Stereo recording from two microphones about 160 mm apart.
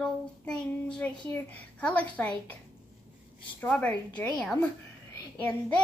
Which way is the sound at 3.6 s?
10° left (ahead or behind).